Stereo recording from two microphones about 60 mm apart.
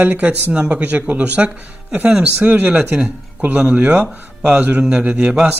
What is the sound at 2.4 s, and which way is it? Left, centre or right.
Speech, right.